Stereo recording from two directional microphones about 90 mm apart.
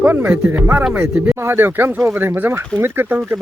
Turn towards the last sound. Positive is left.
turn(degrees=-25)  # may be behind; listen again after turning